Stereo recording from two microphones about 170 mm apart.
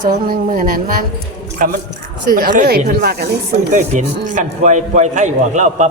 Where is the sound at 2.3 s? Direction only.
55° right (ahead or behind).